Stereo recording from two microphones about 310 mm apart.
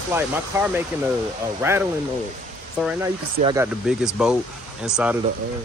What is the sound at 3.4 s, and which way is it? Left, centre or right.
Speech, centre.